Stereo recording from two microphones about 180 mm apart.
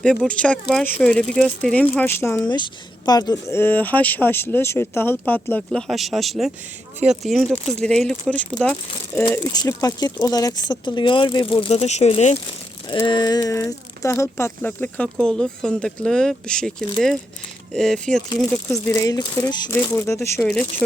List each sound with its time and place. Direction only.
0.0 s speech: 5° left (ahead or behind); by 12.4 s 35° left (ahead or behind)
13.1 s speech: 25° left (ahead or behind); by 16.7 s 5° left (ahead or behind)
17.7 s speech: 5° left (ahead or behind)
18.7 s speech: 15° left (ahead or behind)
20.4 s speech: 5° left (ahead or behind)